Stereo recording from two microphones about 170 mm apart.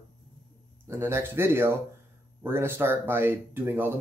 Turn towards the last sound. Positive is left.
turn(degrees=-15)  # may be behind; listen again after turning